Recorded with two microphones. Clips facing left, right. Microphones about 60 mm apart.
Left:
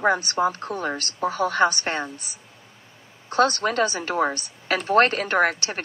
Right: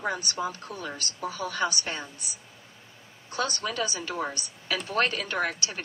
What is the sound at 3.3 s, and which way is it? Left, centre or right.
A woman's voice, left.